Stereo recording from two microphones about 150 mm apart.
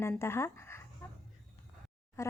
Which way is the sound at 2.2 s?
15° left (ahead or behind).